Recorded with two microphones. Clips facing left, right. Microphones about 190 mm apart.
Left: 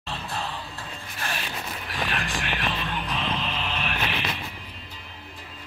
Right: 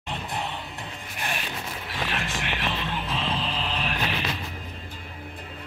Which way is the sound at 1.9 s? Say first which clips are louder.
Left 1 dB; 25° right (ahead or behind).